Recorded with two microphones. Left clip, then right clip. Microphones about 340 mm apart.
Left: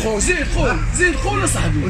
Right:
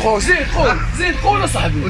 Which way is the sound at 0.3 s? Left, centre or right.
Centre.